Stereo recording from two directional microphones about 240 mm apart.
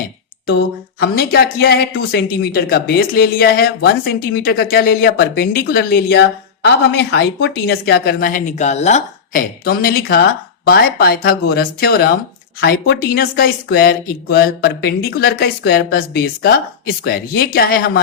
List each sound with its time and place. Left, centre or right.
0.4 s speech: left